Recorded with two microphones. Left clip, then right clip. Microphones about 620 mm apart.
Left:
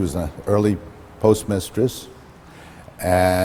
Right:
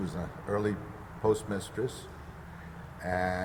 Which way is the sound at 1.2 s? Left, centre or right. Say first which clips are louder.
Left 11 dB; left.